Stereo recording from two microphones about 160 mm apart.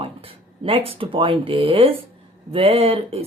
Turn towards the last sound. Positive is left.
turn(degrees=-40)  # may be behind; listen again after turning